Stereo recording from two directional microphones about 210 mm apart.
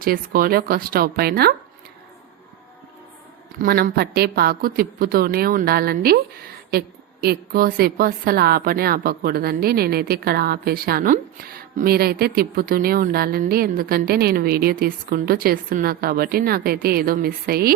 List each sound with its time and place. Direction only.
0.0 s a woman's voice: 45° right (ahead or behind)
3.6 s a woman's voice: 45° right (ahead or behind)